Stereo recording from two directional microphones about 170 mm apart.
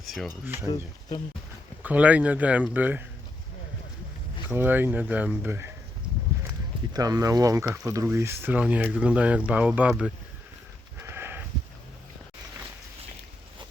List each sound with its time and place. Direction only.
0.0 s a sound: centre (ahead or behind)
0.3 s speech: 15° right (ahead or behind)
1.8 s speech: 10° right (ahead or behind)
4.4 s speech: 10° right (ahead or behind)
6.9 s speech: 25° right (ahead or behind)
11.0 s a sound: 15° right (ahead or behind)